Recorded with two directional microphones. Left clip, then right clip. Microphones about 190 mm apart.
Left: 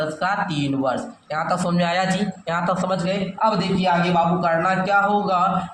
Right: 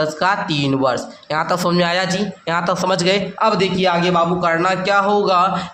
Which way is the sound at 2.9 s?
35° right (ahead or behind).